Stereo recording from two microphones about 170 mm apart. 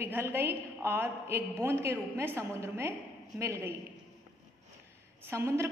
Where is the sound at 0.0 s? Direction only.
15° right (ahead or behind).